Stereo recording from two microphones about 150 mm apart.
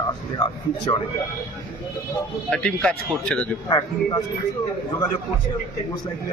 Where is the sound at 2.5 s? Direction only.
5° left (ahead or behind).